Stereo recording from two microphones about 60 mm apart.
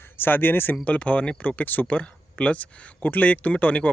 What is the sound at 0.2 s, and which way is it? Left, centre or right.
Speech, left.